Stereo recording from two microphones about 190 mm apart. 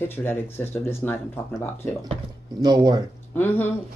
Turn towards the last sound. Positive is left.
turn(degrees=10)  # may be behind; listen again after turning